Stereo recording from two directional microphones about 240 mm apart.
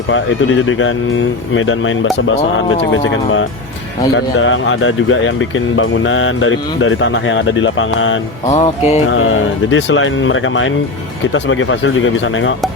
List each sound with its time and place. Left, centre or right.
0.1 s speech: left
4.1 s speech: left
8.4 s music: left
9.0 s speech: left